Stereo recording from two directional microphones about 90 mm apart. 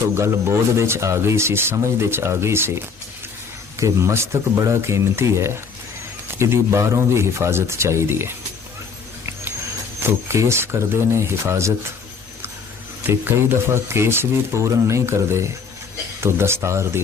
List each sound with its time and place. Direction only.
0.1 s speech: 30° right (ahead or behind)
10.0 s speech: 30° right (ahead or behind)
13.1 s speech: 25° right (ahead or behind)